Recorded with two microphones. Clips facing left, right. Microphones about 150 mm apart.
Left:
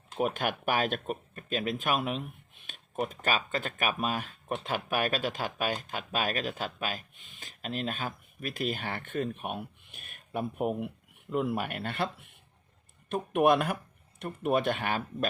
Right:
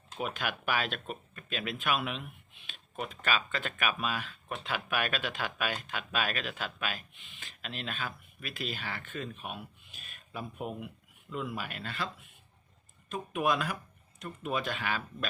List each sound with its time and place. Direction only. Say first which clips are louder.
0.2 s speech: left 6 dB; 45° left (ahead or behind)